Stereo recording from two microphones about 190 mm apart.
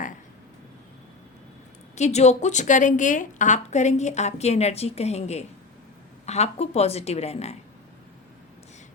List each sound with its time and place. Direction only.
2.0 s a woman's voice: 35° left (ahead or behind)